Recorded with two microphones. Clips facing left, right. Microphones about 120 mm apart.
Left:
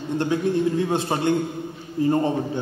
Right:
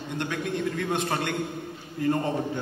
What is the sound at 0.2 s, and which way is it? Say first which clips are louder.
A man's voice: left 7 dB; 30° left (ahead or behind).